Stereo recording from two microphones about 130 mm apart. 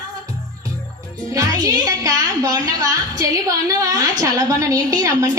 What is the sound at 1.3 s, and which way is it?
A woman's voice, 30° right (ahead or behind).